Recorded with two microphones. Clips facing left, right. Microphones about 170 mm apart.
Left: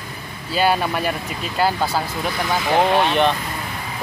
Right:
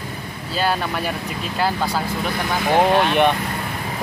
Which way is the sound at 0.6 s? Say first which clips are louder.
Left 3 dB; 5° left (ahead or behind).